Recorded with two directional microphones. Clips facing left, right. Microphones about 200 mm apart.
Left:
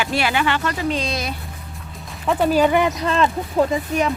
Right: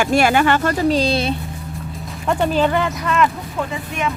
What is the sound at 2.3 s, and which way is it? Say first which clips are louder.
Speech: left 1 dB; 5° left (ahead or behind).